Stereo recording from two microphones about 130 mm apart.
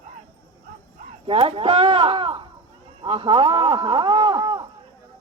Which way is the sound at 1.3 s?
45° right (ahead or behind).